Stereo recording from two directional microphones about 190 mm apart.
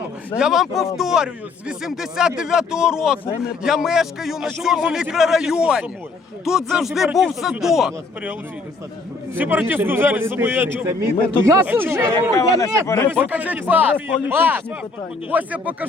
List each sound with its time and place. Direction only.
0.3 s speech: 5° right (ahead or behind)
9.4 s a man's voice: 10° right (ahead or behind)
12.4 s speech: 15° left (ahead or behind)
13.2 s a man's voice: 10° right (ahead or behind)